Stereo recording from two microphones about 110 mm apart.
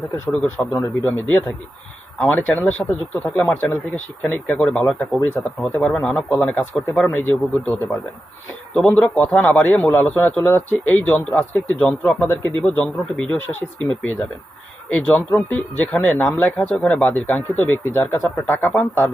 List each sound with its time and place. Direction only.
0.3 s a man's voice: 15° left (ahead or behind)